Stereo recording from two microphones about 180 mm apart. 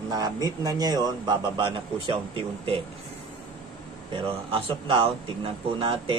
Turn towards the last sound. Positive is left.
turn(degrees=-30)  # may be behind; listen again after turning